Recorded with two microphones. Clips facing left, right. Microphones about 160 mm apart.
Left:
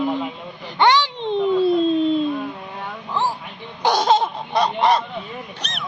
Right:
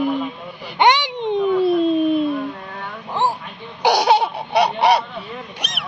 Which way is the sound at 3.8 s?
10° right (ahead or behind).